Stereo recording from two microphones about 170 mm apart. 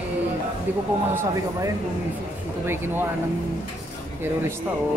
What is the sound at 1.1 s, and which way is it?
Speech, 15° right (ahead or behind).